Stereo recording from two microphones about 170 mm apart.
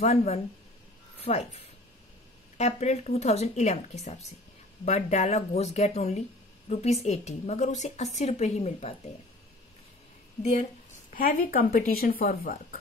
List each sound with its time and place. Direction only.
0.0 s a woman's voice: 40° left (ahead or behind)
10.4 s a woman's voice: 45° left (ahead or behind); by 12.5 s 60° left (ahead or behind)